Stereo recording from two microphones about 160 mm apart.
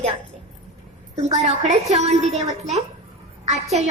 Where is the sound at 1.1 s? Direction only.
45° right (ahead or behind).